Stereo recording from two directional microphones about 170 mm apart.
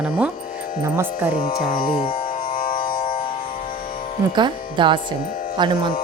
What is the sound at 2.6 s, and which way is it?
Music, 55° left (ahead or behind).